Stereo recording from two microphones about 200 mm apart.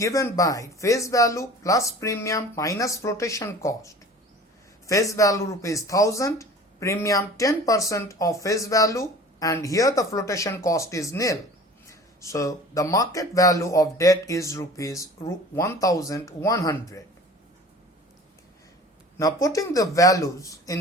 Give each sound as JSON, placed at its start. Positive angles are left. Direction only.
{"t": 0.0, "sound": "speech", "side_deg": 15}
{"t": 19.1, "sound": "speech", "side_deg": 15}